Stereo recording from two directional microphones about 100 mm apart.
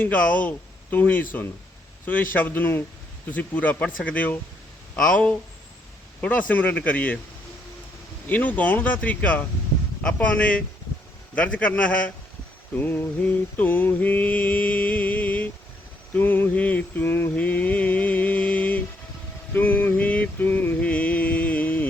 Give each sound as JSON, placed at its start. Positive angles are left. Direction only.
{"t": 0.0, "sound": "mantra", "side_deg": 15}
{"t": 2.0, "sound": "speech", "side_deg": 20}
{"t": 3.2, "sound": "mantra", "side_deg": 15}
{"t": 8.3, "sound": "mantra", "side_deg": 15}
{"t": 12.7, "sound": "speech", "side_deg": 20}
{"t": 13.2, "sound": "mantra", "side_deg": 15}